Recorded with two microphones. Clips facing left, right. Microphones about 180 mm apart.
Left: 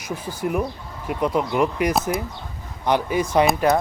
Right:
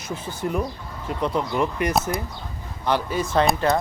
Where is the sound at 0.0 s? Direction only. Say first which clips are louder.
Left 2 dB; 10° left (ahead or behind).